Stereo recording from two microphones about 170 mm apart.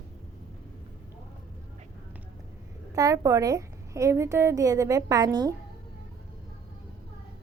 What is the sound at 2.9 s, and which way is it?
Speech, 20° right (ahead or behind).